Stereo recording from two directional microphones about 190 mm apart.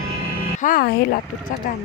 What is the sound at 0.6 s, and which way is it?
Speech, 50° left (ahead or behind).